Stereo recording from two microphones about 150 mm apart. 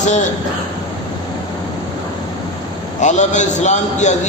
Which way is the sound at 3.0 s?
55° left (ahead or behind).